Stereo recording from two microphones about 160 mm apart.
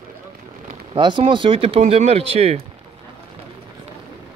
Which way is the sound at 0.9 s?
30° right (ahead or behind).